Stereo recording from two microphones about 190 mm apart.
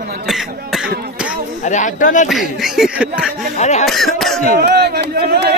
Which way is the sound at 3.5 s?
35° left (ahead or behind).